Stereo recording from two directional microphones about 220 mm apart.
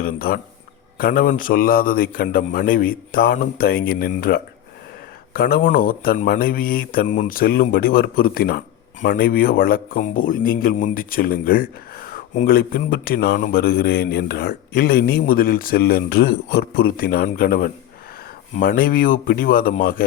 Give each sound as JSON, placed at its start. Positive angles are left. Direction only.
{"t": 0.0, "sound": "speech", "side_deg": 40}